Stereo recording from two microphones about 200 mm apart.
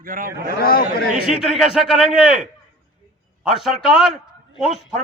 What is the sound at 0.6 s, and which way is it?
Speech, 45° left (ahead or behind).